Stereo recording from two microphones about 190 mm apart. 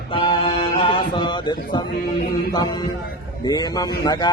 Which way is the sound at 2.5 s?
20° left (ahead or behind).